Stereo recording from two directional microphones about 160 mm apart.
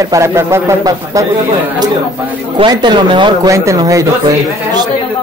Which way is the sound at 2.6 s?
25° right (ahead or behind).